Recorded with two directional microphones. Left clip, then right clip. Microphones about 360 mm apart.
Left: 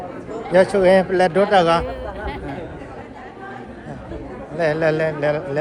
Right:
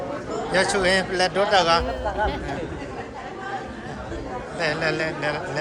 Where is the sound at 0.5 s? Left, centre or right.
Centre.